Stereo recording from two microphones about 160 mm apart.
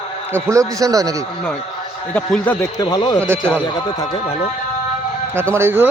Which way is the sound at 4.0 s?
40° left (ahead or behind).